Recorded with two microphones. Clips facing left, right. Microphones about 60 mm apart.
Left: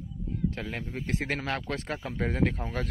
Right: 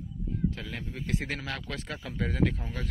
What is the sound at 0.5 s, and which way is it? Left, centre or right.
Speech, left.